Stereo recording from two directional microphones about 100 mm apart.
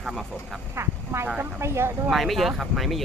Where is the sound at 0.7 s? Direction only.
25° right (ahead or behind).